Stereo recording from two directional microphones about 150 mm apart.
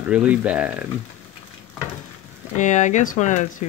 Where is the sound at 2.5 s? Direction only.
55° left (ahead or behind).